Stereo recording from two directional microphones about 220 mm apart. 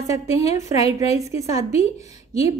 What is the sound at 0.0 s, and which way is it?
A woman's voice, 15° right (ahead or behind).